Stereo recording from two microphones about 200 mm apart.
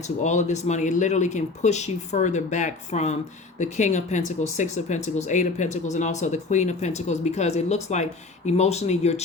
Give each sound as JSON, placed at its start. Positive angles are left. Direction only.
{"t": 0.0, "sound": "speech", "side_deg": 35}